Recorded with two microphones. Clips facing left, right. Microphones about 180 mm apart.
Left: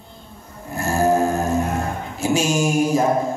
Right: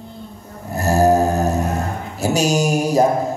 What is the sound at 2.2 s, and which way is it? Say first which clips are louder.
Speech: right 2 dB; 40° right (ahead or behind).